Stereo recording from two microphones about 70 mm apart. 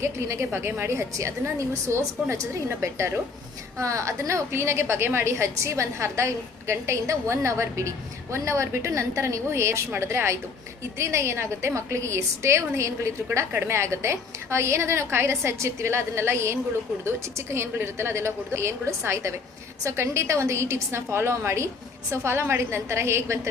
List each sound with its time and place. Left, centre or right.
0.0 s a woman's voice: right
4.5 s a woman's voice: right